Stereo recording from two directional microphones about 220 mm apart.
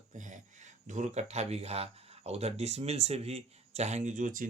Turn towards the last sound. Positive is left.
turn(degrees=-35)  # may be behind; listen again after turning